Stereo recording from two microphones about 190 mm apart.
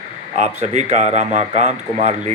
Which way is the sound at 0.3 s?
35° right (ahead or behind).